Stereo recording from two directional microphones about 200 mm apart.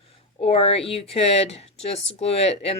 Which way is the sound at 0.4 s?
30° left (ahead or behind).